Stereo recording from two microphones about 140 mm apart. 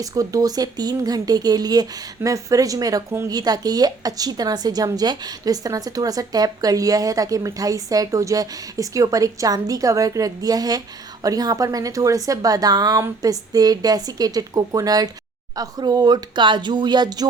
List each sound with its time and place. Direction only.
0.0 s speech: 25° right (ahead or behind)